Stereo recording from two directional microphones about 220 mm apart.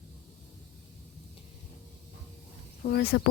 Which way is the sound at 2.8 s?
45° left (ahead or behind).